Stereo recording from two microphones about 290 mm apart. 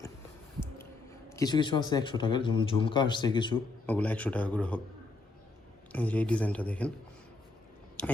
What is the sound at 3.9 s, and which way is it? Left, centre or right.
Speech, centre.